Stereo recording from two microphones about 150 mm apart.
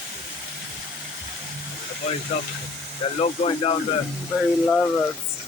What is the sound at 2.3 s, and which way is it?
Speech, 45° left (ahead or behind).